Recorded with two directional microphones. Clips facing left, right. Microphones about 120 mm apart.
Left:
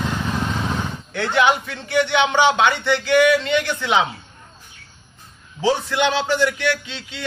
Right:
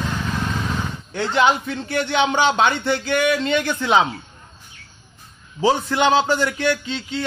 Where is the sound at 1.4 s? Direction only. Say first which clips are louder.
Even; 35° right (ahead or behind).